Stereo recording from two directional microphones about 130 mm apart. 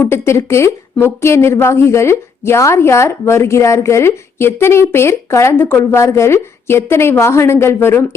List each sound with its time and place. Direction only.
0.0 s a woman's voice: 20° left (ahead or behind)